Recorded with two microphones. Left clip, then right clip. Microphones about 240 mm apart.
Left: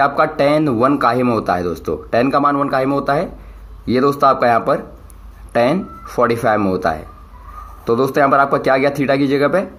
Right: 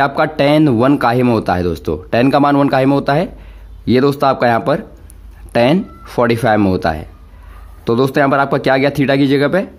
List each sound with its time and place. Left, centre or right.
0.0 s speech: right